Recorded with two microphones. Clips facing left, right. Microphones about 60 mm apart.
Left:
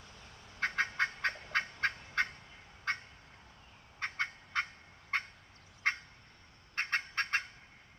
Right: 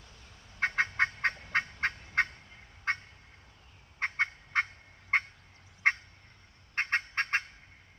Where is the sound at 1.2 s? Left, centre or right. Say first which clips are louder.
Right 3 dB; right.